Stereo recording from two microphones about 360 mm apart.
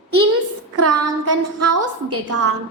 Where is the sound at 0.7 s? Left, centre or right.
Right.